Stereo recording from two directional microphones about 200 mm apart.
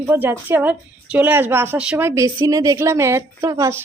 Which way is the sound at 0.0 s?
10° right (ahead or behind).